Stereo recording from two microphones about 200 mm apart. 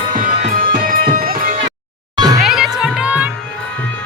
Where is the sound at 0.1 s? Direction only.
40° right (ahead or behind).